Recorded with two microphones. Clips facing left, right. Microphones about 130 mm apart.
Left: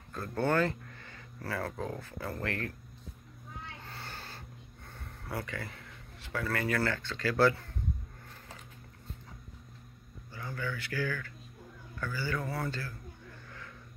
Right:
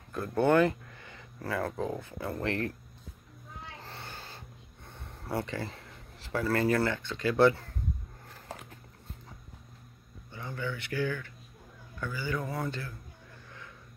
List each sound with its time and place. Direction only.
0.1 s speech: 15° right (ahead or behind)
4.0 s a sound: 15° right (ahead or behind)
4.9 s speech: 30° right (ahead or behind)
10.3 s speech: 20° right (ahead or behind)